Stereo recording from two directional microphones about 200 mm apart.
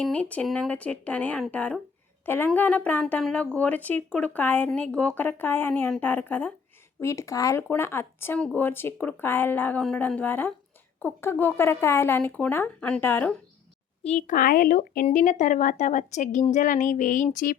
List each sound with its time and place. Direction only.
0.0 s a woman's voice: 5° left (ahead or behind)
14.0 s a woman's voice: 35° left (ahead or behind)